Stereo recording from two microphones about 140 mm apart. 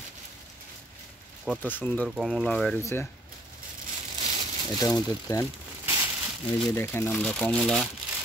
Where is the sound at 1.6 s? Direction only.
15° left (ahead or behind).